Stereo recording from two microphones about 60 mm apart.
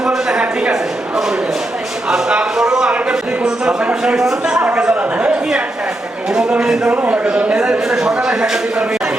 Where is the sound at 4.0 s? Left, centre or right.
Centre.